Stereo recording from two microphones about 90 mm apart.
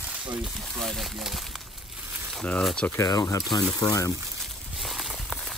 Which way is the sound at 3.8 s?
40° left (ahead or behind).